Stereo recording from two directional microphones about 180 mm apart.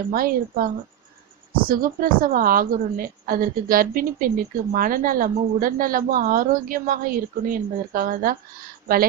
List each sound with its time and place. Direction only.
0.1 s a woman's voice: 50° right (ahead or behind)